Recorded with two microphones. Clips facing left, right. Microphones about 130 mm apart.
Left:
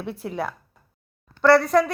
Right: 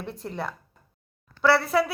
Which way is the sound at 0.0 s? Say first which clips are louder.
Left 4 dB; 5° left (ahead or behind).